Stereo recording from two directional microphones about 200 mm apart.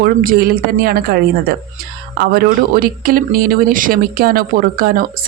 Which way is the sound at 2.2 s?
50° right (ahead or behind).